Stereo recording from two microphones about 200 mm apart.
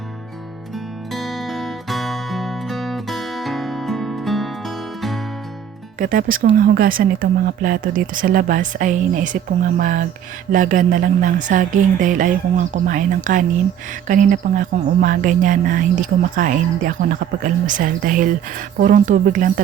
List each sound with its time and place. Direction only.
1.1 s music: centre (ahead or behind)
6.0 s a woman's voice: 45° right (ahead or behind)